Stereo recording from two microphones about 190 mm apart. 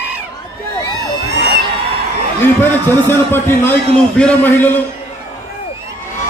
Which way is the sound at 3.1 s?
10° left (ahead or behind).